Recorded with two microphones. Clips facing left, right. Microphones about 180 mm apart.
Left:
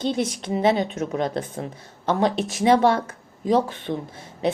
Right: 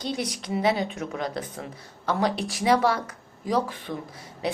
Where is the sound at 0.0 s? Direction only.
25° left (ahead or behind).